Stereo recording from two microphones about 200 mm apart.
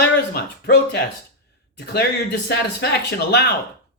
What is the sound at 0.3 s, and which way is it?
Speech, 55° left (ahead or behind).